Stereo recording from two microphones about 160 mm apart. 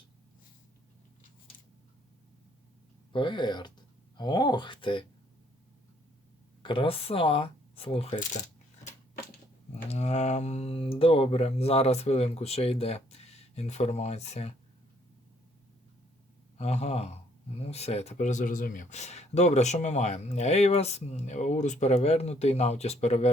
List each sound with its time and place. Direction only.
3.1 s speech: 30° left (ahead or behind)
6.6 s speech: 30° left (ahead or behind)
9.9 s speech: 45° left (ahead or behind)
16.6 s speech: 40° left (ahead or behind)